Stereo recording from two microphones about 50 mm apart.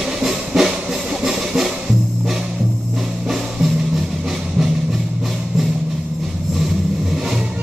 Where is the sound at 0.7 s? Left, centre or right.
Centre.